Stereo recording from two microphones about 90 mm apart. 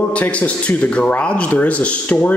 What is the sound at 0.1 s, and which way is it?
Speech, 15° left (ahead or behind).